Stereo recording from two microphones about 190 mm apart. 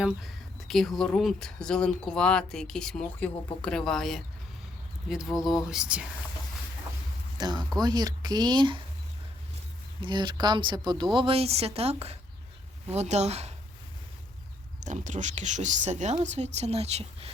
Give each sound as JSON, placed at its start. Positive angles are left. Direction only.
{"t": 0.7, "sound": "speech", "side_deg": 0}
{"t": 7.3, "sound": "speech", "side_deg": -20}
{"t": 10.0, "sound": "speech", "side_deg": -25}
{"t": 14.8, "sound": "speech", "side_deg": -40}